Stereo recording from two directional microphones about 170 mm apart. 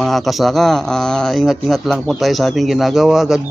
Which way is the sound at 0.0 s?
Centre (ahead or behind).